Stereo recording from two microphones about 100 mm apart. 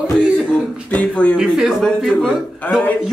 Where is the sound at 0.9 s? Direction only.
15° left (ahead or behind).